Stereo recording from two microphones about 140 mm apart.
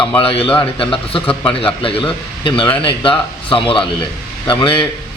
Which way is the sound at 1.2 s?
10° left (ahead or behind).